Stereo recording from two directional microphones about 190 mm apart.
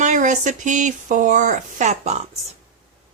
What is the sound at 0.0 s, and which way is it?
Speech, 40° right (ahead or behind).